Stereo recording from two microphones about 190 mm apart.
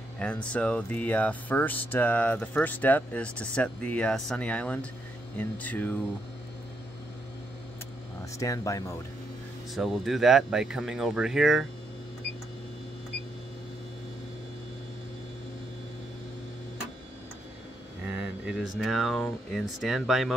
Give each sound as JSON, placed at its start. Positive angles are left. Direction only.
{"t": 0.5, "sound": "speech", "side_deg": 5}
{"t": 8.4, "sound": "speech", "side_deg": 15}
{"t": 9.8, "sound": "speech", "side_deg": 0}
{"t": 18.1, "sound": "speech", "side_deg": -5}